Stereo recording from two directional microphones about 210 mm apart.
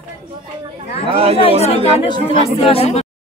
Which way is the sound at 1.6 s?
30° left (ahead or behind).